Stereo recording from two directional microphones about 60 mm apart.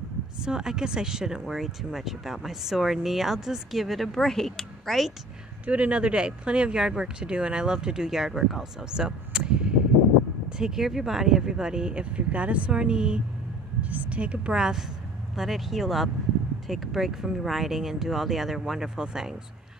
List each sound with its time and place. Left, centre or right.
0.4 s speech: centre
5.7 s speech: centre